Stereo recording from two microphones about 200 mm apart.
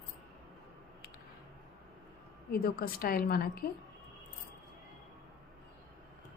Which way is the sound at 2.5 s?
45° left (ahead or behind).